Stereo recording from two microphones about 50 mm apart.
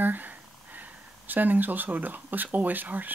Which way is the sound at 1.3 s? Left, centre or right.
Right.